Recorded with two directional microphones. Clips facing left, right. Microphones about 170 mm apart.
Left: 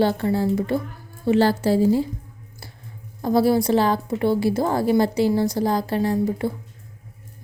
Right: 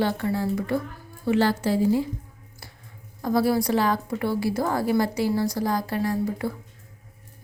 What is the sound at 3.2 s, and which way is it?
A woman's voice, 25° left (ahead or behind).